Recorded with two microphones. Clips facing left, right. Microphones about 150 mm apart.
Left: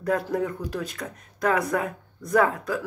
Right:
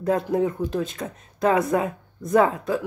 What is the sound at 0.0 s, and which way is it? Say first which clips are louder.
Speech: right 3 dB; 25° right (ahead or behind).